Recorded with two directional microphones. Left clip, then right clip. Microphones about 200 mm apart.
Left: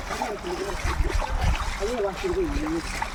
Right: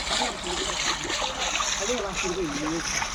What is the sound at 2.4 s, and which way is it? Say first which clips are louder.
Speech: even; 35° right (ahead or behind).